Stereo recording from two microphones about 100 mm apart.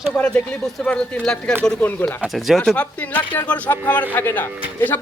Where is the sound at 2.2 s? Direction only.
Centre (ahead or behind).